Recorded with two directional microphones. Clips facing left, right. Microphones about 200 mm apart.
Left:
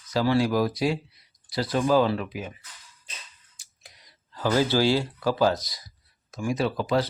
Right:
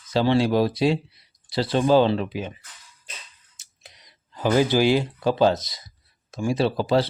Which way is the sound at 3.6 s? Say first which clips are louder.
Right 4 dB; 25° right (ahead or behind).